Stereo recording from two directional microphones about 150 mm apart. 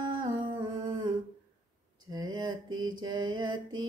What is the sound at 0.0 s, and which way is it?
Humming, 30° right (ahead or behind).